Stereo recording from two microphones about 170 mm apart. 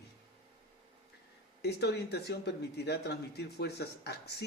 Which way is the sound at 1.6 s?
75° left (ahead or behind).